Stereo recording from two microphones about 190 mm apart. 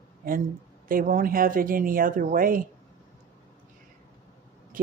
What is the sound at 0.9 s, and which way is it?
Speech, 45° right (ahead or behind).